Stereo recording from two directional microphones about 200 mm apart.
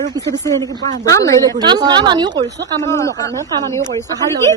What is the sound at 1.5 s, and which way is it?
A woman's voice, 20° right (ahead or behind).